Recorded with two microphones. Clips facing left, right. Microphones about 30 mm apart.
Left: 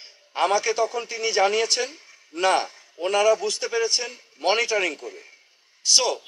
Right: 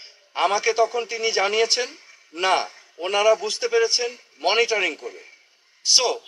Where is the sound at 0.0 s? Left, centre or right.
Centre.